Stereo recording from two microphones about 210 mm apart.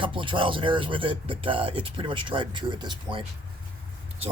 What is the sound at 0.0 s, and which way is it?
Speech, 25° right (ahead or behind).